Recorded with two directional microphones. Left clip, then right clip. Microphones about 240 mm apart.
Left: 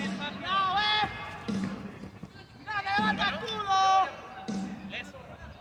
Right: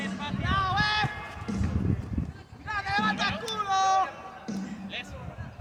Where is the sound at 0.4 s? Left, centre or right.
Centre.